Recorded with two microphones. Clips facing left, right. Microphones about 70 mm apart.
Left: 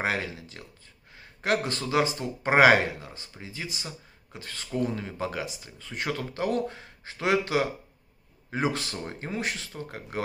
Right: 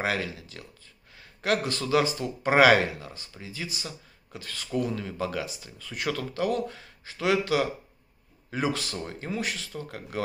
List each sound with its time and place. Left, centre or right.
0.0 s speech: left